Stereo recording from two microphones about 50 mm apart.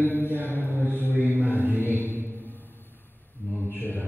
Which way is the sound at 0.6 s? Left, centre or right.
Right.